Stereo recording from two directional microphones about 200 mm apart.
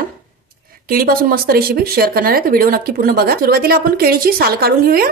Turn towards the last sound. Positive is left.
turn(degrees=-50)  # may be behind; listen again after turning